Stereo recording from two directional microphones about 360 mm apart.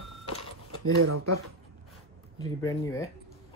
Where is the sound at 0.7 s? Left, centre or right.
Right.